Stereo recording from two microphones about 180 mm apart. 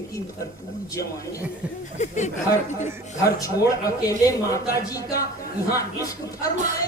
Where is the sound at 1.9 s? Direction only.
40° left (ahead or behind).